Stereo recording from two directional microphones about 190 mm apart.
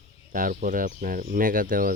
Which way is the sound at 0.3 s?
45° right (ahead or behind).